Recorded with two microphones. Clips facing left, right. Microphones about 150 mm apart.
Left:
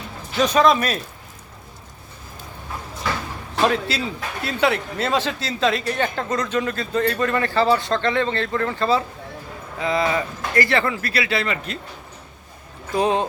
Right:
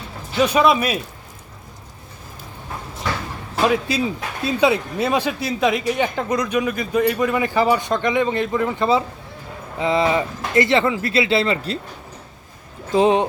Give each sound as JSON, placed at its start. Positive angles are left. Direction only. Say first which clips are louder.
{"t": 0.3, "sound": "speech", "louder": "right 1 dB", "side_deg": -10}
{"t": 3.5, "sound": "a sound", "louder": "right 1 dB", "side_deg": -5}
{"t": 3.8, "sound": "speech", "louder": "right 4 dB", "side_deg": -15}
{"t": 12.9, "sound": "speech", "louder": "right 4 dB", "side_deg": -20}